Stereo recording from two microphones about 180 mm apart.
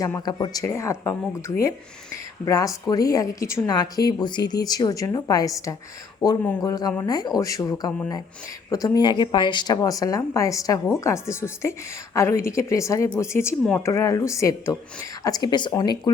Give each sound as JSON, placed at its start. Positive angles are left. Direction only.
{"t": 0.0, "sound": "a woman's voice", "side_deg": 20}
{"t": 2.4, "sound": "a woman's voice", "side_deg": 20}